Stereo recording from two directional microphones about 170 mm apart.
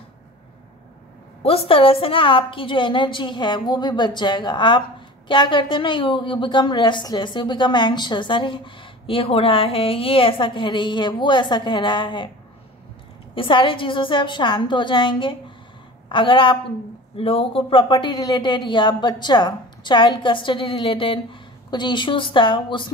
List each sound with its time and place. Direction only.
1.4 s a woman's voice: 35° left (ahead or behind)
13.3 s a woman's voice: 30° left (ahead or behind)